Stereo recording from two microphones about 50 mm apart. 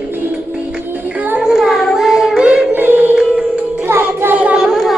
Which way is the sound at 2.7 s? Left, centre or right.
Right.